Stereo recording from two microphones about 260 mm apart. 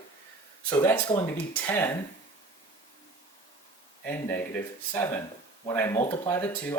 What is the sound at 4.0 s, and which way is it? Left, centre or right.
Speech, centre.